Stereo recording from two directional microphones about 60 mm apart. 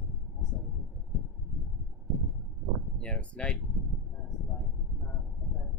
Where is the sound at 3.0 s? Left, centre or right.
Left.